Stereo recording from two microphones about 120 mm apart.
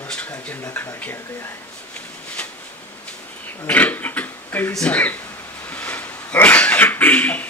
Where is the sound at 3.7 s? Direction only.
15° left (ahead or behind).